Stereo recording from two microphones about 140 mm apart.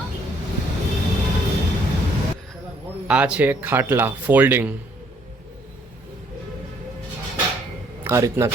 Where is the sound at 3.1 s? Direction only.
10° right (ahead or behind).